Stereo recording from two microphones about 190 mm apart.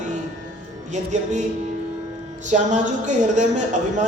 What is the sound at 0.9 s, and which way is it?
Speech, 40° right (ahead or behind).